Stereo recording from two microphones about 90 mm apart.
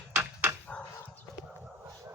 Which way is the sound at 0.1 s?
25° right (ahead or behind).